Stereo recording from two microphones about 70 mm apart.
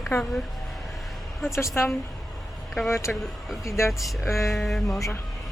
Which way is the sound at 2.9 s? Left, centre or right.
Left.